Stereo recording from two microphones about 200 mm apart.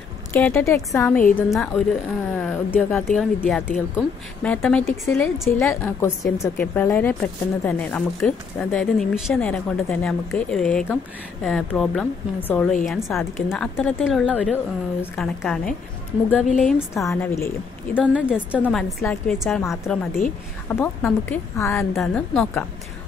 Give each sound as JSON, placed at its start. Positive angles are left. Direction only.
{"t": 0.3, "sound": "a woman's voice", "side_deg": 10}
{"t": 17.9, "sound": "speech", "side_deg": -5}
{"t": 19.6, "sound": "a woman's voice", "side_deg": 15}
{"t": 20.2, "sound": "a woman's voice", "side_deg": 40}
{"t": 20.6, "sound": "a woman's voice", "side_deg": 10}
{"t": 21.9, "sound": "speech", "side_deg": 0}